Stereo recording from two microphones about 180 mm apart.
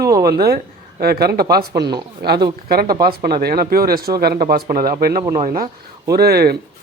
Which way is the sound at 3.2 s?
55° right (ahead or behind).